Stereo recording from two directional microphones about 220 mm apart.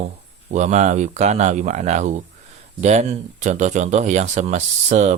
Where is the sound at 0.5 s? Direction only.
30° right (ahead or behind).